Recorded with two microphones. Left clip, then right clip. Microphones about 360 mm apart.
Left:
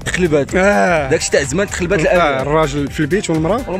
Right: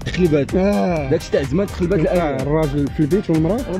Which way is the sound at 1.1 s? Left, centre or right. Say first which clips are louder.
Left 4 dB; left.